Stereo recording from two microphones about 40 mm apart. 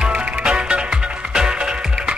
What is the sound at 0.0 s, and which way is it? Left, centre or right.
Music, right.